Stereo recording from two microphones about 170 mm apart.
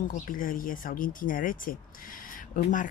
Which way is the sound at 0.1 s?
55° left (ahead or behind).